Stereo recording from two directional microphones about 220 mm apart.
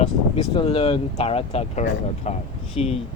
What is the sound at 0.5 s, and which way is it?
Speech, 25° left (ahead or behind).